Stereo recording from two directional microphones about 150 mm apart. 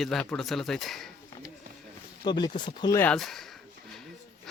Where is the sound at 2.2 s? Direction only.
30° left (ahead or behind).